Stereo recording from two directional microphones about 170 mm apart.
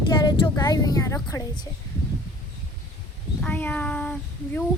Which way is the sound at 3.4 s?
10° left (ahead or behind).